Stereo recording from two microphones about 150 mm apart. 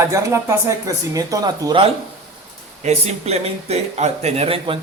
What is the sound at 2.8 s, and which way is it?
Speech, 45° right (ahead or behind).